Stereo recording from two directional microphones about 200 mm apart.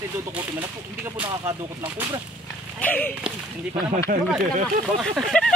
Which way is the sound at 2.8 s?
10° left (ahead or behind).